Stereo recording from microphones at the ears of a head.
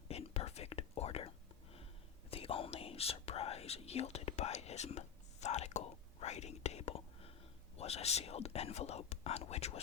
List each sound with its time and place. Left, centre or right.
0.1 s whispering: left
2.3 s whispering: left
7.8 s speech: left